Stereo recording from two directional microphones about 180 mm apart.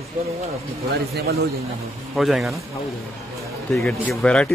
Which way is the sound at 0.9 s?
60° right (ahead or behind).